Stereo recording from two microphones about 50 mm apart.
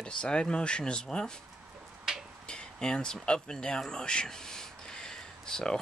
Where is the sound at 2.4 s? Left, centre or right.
Centre.